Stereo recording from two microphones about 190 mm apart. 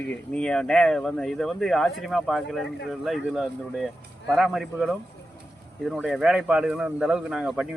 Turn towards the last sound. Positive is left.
turn(degrees=-5)  # may be behind; listen again after turning